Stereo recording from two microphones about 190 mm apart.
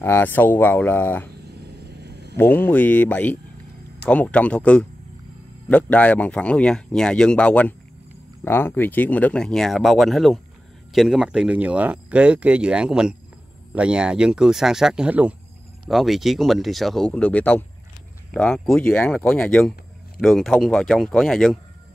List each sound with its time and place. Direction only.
0.0 s speech: 10° left (ahead or behind)
1.9 s a sound: 60° right (ahead or behind)
2.3 s speech: 10° left (ahead or behind)